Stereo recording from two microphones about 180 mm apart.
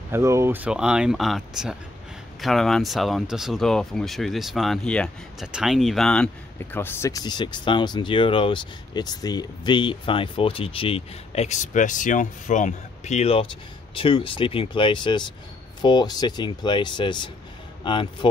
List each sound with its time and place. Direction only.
0.1 s speech: 15° right (ahead or behind); by 18.0 s 25° left (ahead or behind)